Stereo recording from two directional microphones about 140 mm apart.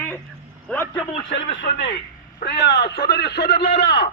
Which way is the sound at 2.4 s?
80° left.